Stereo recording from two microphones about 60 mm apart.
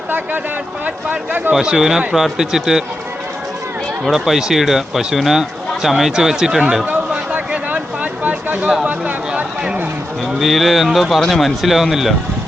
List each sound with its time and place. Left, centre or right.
0.9 s speech: right
1.6 s speech: centre
4.0 s speech: centre
7.1 s a sound: right
8.9 s speech: right
10.2 s speech: centre